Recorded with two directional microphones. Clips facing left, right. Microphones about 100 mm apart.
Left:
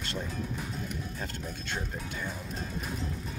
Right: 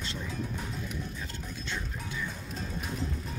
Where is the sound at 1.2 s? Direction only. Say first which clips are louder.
Left 2 dB; 50° left (ahead or behind).